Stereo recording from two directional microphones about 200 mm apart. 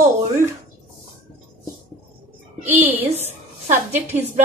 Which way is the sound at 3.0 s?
30° right (ahead or behind).